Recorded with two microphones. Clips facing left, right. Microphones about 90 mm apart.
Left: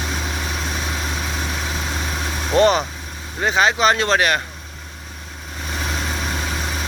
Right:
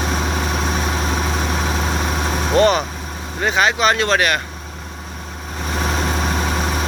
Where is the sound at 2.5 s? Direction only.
20° left (ahead or behind).